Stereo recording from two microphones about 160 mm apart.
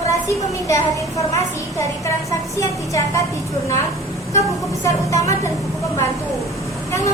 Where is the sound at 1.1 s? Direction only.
20° left (ahead or behind).